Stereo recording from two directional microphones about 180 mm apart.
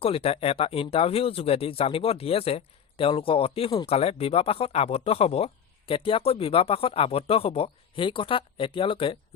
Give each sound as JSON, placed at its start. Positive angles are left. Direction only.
{"t": 0.0, "sound": "speech", "side_deg": 35}